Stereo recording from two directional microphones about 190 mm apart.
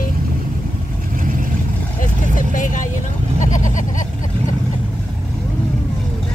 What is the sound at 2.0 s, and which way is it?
Vehicle, 45° left (ahead or behind).